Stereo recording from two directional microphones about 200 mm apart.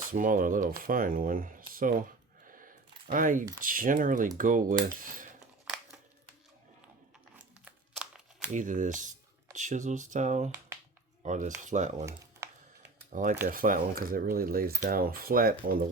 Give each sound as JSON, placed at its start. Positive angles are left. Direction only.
{"t": 0.1, "sound": "speech", "side_deg": -40}
{"t": 5.6, "sound": "a sound", "side_deg": 0}
{"t": 7.3, "sound": "crumpling", "side_deg": -5}
{"t": 8.5, "sound": "speech", "side_deg": -40}
{"t": 11.2, "sound": "cutlery", "side_deg": -40}
{"t": 11.6, "sound": "speech", "side_deg": -40}
{"t": 12.0, "sound": "computer keyboard", "side_deg": -15}
{"t": 13.1, "sound": "speech", "side_deg": -40}